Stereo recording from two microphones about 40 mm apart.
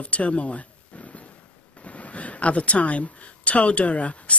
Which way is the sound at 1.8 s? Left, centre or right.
Left.